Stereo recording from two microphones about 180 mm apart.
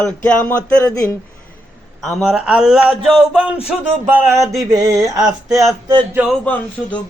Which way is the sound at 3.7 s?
15° right (ahead or behind).